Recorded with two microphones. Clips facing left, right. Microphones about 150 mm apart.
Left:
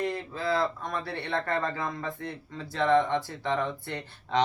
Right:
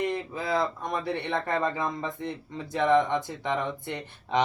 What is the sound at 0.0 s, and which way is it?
Speech, 20° right (ahead or behind).